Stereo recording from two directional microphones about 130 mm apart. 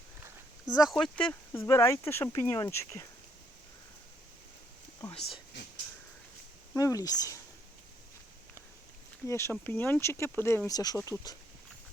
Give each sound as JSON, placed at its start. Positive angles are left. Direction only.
{"t": 0.9, "sound": "speech", "side_deg": 5}
{"t": 1.5, "sound": "speech", "side_deg": 20}
{"t": 6.7, "sound": "speech", "side_deg": 25}
{"t": 9.2, "sound": "speech", "side_deg": 20}
{"t": 10.7, "sound": "speech", "side_deg": 30}